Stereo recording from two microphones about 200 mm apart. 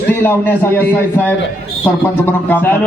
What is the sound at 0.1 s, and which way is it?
A man's voice, 10° left (ahead or behind).